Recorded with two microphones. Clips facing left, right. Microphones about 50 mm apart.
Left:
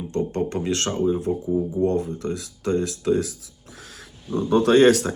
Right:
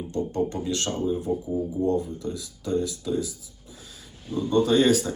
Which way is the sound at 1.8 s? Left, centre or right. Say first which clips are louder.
Left 3 dB; left.